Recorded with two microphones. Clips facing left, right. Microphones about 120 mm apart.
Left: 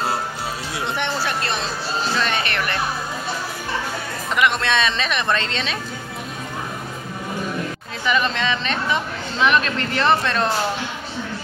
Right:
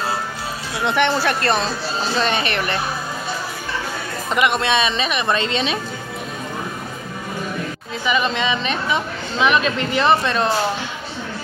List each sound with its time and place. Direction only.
0.8 s speech: 75° right (ahead or behind)
1.4 s speech: 45° right (ahead or behind)
2.1 s speech: 20° right (ahead or behind)
4.3 s speech: 20° right (ahead or behind)
8.0 s speech: 5° right (ahead or behind)